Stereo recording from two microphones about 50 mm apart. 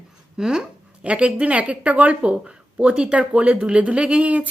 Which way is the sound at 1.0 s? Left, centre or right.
Right.